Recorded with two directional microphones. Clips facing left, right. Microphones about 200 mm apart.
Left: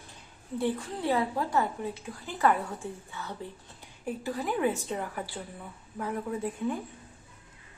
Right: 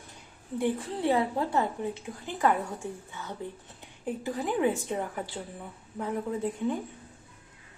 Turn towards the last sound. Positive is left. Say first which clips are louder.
# right 2 dB
turn(degrees=-20)  # may be behind; listen again after turning